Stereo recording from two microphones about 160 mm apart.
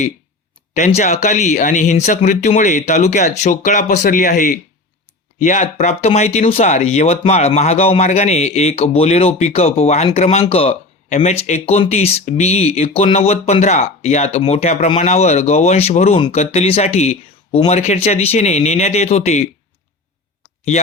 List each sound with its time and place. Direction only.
0.7 s speech: 45° left (ahead or behind)